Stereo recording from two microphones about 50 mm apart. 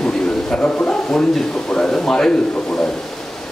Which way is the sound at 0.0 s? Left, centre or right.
Centre.